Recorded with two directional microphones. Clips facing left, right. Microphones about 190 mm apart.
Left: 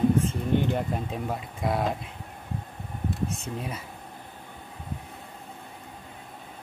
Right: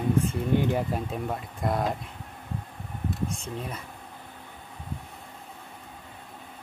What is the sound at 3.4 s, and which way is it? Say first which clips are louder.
Speech: left 1 dB; 5° left (ahead or behind).